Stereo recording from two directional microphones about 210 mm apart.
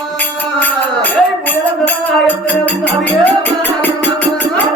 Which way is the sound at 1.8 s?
5° left (ahead or behind).